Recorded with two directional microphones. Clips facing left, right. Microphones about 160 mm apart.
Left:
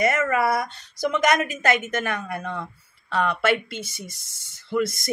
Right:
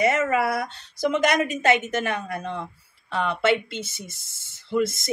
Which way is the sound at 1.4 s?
25° right (ahead or behind).